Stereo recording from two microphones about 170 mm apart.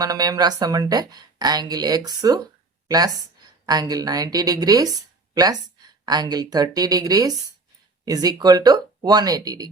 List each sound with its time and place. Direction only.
0.0 s speech: 20° right (ahead or behind)